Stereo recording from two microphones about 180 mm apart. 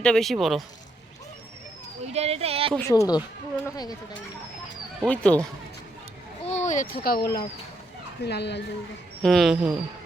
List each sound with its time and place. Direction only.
0.0 s speech: 5° left (ahead or behind)
2.0 s speech: 35° right (ahead or behind)
2.7 s speech: 15° left (ahead or behind)
5.0 s speech: 5° left (ahead or behind)
6.4 s speech: 40° left (ahead or behind); by 8.6 s 70° left (ahead or behind)
9.2 s speech: centre (ahead or behind)